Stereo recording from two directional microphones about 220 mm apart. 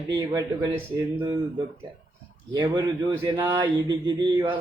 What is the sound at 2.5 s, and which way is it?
Speech, 20° right (ahead or behind).